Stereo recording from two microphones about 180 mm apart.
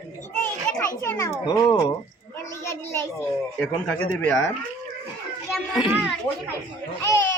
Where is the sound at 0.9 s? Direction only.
15° left (ahead or behind).